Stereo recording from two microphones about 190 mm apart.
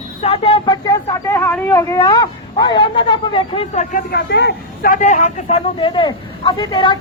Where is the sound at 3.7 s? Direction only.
40° left (ahead or behind).